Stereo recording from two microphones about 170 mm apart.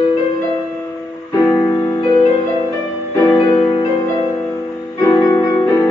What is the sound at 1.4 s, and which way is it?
Music, 25° left (ahead or behind).